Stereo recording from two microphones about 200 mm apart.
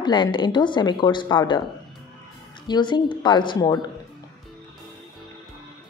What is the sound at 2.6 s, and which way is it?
A woman's voice, 20° left (ahead or behind).